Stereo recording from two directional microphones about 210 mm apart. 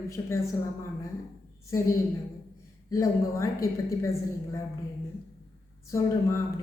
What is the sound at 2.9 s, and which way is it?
Speech, 15° left (ahead or behind).